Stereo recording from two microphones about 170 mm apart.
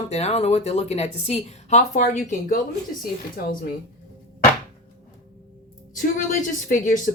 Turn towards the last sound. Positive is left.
turn(degrees=50)  # may be behind; listen again after turning